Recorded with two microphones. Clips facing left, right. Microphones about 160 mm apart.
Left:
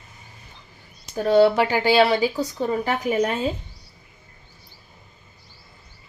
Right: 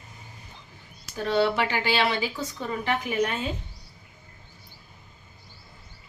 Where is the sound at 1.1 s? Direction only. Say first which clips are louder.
Left 8 dB; 40° left (ahead or behind).